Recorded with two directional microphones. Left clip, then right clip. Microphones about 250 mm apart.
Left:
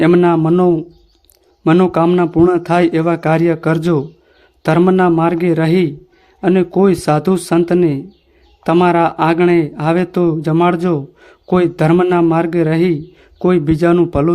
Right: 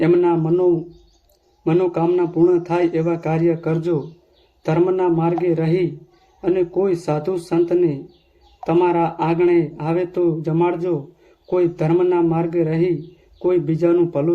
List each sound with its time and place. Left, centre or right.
0.0 s a man's voice: left